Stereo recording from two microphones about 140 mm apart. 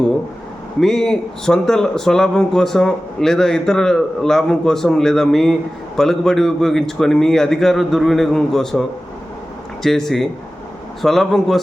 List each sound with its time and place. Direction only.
0.8 s a man's voice: 5° left (ahead or behind)
9.8 s a man's voice: centre (ahead or behind)